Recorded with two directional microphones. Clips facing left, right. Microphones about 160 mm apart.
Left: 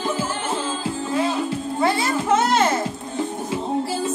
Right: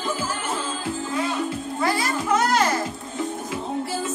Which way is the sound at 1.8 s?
25° left (ahead or behind).